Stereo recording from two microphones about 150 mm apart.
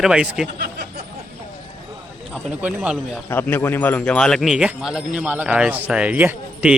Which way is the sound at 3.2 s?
15° left (ahead or behind).